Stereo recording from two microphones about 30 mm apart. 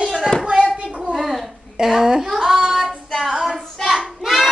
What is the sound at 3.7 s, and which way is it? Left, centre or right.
Child singing, centre.